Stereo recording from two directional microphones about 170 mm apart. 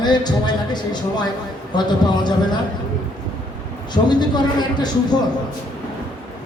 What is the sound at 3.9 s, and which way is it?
Speech, 25° left (ahead or behind).